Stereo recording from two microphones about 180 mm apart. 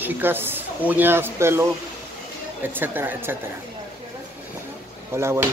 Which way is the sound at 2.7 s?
10° right (ahead or behind).